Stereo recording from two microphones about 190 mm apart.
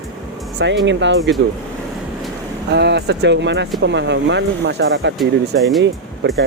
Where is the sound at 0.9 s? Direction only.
70° right (ahead or behind).